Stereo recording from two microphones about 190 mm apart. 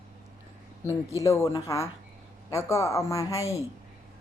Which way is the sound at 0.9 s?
15° left (ahead or behind).